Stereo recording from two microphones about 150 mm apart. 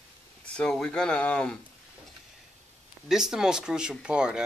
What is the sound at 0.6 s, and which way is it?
Speech, 5° left (ahead or behind).